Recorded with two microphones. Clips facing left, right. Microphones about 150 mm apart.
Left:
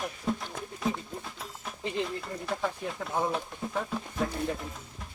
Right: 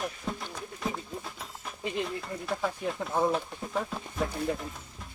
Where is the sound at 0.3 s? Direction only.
Centre (ahead or behind).